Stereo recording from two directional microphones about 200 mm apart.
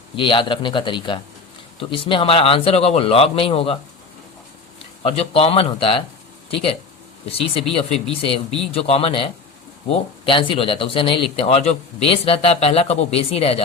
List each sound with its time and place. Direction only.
0.2 s speech: 25° left (ahead or behind)
5.0 s speech: 30° left (ahead or behind)